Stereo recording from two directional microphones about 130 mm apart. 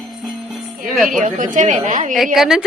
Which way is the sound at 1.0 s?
90° right.